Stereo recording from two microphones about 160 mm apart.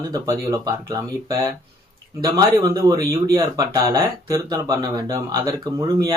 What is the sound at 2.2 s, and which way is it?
Speech, 25° right (ahead or behind).